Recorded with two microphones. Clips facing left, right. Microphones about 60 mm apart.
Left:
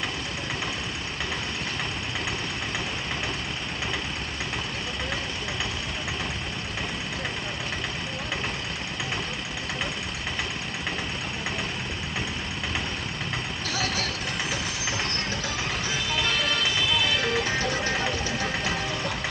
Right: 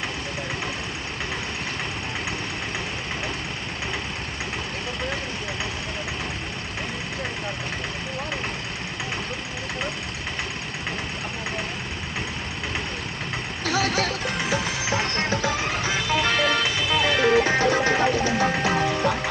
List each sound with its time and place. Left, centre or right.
13.7 s vehicle: right
14.9 s music: centre
15.8 s music: right
16.6 s music: centre
17.0 s music: right
17.9 s a sound: centre
18.5 s music: centre